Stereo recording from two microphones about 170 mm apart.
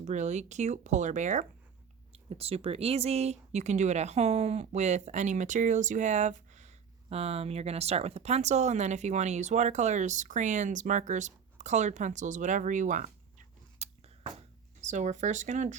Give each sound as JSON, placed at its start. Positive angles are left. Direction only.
{"t": 0.0, "sound": "speech", "side_deg": -45}
{"t": 13.7, "sound": "a sound", "side_deg": -40}
{"t": 14.8, "sound": "speech", "side_deg": -45}